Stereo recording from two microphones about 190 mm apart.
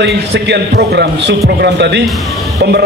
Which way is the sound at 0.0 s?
60° right (ahead or behind).